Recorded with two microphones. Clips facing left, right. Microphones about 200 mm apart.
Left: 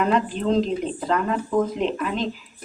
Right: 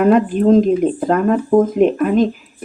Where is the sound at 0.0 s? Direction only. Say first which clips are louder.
Right 9 dB; 50° right (ahead or behind).